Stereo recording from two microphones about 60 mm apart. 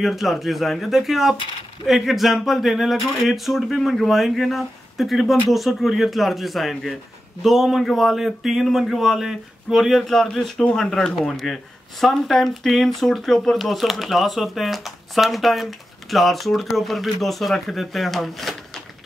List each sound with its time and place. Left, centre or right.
0.0 s speech: centre